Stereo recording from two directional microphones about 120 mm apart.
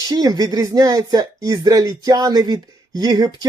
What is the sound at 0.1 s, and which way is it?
Speech, 30° right (ahead or behind).